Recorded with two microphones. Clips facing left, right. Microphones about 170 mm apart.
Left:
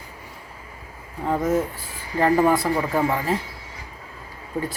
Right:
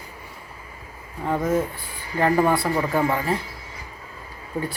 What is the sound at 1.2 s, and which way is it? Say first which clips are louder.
Speech: left 1 dB; centre (ahead or behind).